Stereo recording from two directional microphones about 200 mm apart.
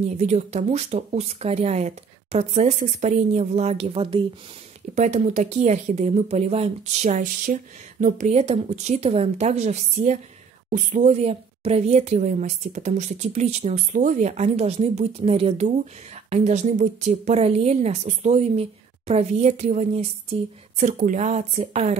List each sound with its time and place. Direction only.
0.2 s a woman's voice: 35° right (ahead or behind)